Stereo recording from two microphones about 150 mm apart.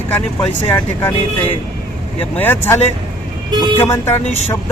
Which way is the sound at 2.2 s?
15° left (ahead or behind).